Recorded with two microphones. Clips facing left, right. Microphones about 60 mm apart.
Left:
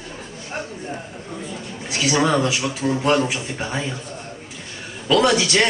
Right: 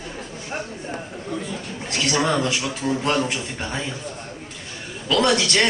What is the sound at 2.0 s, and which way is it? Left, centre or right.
Speech, centre.